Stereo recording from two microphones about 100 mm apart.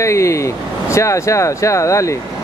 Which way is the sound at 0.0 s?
30° left (ahead or behind).